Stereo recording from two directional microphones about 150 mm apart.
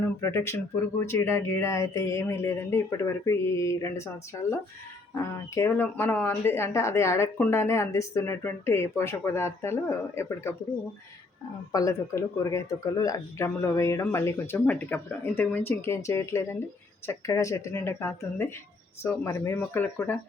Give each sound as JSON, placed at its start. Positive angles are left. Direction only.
{"t": 0.2, "sound": "speech", "side_deg": 15}
{"t": 5.5, "sound": "speech", "side_deg": 15}
{"t": 11.7, "sound": "speech", "side_deg": 20}